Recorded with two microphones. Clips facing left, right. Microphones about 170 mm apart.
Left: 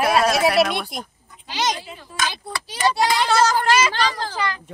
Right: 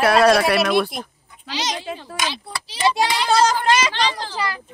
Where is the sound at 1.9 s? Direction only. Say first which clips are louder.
Right 9 dB; 65° right (ahead or behind).